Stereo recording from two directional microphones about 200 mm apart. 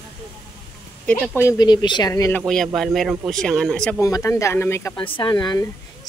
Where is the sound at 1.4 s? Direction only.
15° left (ahead or behind).